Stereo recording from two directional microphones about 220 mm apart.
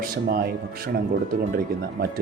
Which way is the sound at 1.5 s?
40° right (ahead or behind).